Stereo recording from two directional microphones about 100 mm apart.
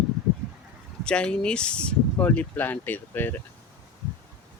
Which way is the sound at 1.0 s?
10° left (ahead or behind).